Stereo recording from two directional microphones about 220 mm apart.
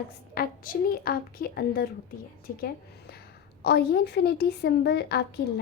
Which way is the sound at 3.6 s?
50° left (ahead or behind).